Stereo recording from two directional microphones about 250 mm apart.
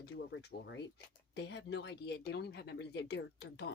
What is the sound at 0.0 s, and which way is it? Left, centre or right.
Speech, left.